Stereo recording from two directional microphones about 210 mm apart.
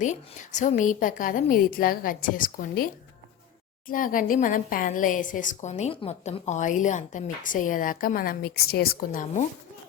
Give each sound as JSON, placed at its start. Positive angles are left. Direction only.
{"t": 0.0, "sound": "a woman's voice", "side_deg": 35}
{"t": 3.8, "sound": "a woman's voice", "side_deg": 40}